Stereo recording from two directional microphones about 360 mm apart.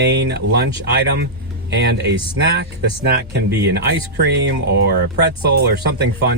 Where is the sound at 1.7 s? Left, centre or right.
Right.